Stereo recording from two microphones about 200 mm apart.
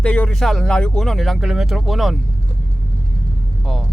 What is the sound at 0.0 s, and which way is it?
Speech, 5° left (ahead or behind).